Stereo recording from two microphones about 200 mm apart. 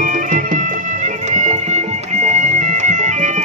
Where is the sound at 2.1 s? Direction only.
35° right (ahead or behind).